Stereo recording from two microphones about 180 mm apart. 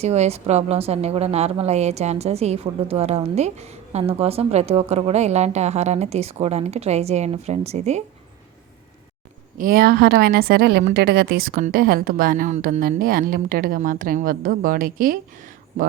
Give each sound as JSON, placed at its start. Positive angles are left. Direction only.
{"t": 0.0, "sound": "a woman's voice", "side_deg": -35}
{"t": 9.6, "sound": "a woman's voice", "side_deg": -55}